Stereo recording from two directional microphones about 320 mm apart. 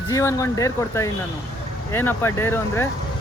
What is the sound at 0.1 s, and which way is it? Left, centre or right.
Speech, centre.